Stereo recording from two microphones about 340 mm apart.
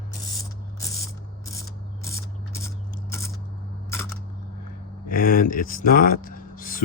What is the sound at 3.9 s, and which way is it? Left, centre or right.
Single-lens reflex camera, centre.